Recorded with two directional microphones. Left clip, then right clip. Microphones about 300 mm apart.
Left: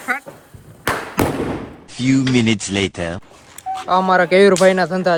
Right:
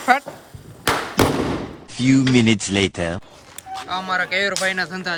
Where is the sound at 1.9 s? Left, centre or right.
Centre.